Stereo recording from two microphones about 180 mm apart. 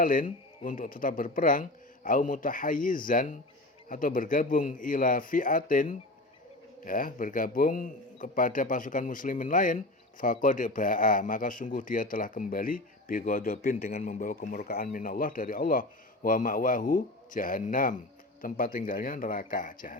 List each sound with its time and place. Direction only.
0.0 s a man's voice: 50° left (ahead or behind)